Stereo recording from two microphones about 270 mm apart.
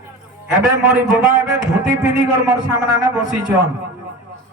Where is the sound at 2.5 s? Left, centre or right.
Centre.